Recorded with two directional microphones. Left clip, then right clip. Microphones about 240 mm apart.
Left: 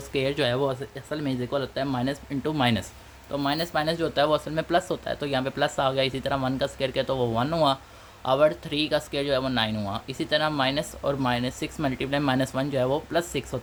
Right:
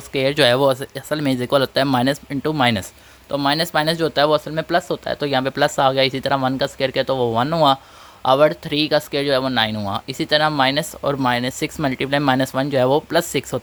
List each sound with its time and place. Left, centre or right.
0.1 s speech: right